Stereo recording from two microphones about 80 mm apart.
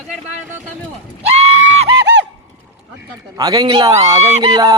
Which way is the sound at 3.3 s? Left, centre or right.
Right.